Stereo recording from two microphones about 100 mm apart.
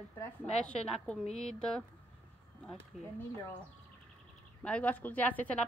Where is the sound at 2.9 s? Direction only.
5° right (ahead or behind).